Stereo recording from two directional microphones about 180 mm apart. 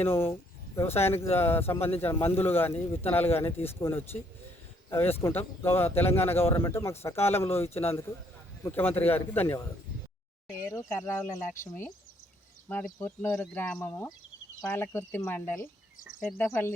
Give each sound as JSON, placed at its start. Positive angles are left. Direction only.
{"t": 0.0, "sound": "speech", "side_deg": 15}
{"t": 10.7, "sound": "speech", "side_deg": 15}